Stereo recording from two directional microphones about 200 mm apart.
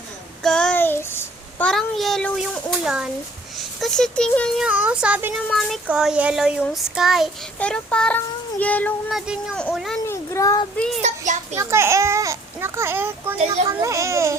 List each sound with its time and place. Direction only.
0.4 s child singing: 5° left (ahead or behind)
10.1 s a sound: 15° left (ahead or behind)
10.8 s child singing: centre (ahead or behind)
11.5 s a child's voice: 15° right (ahead or behind)